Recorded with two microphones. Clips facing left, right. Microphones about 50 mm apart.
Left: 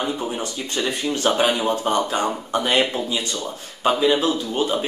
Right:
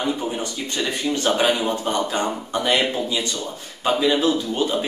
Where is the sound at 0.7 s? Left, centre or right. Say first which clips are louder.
Even; centre.